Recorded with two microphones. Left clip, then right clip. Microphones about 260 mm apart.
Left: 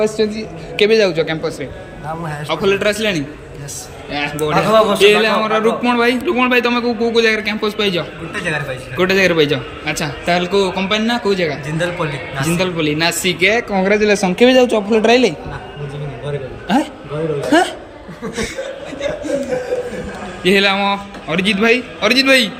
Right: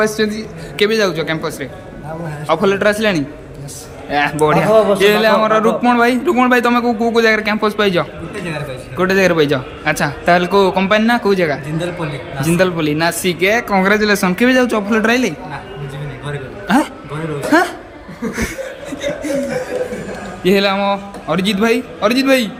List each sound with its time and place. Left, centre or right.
0.0 s a man's voice: centre
4.5 s a man's voice: right
4.9 s a man's voice: centre
20.4 s a man's voice: centre